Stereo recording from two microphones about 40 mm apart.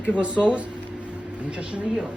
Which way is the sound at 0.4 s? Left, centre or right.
Left.